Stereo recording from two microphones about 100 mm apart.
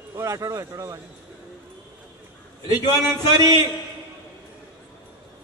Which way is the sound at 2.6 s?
40° left (ahead or behind).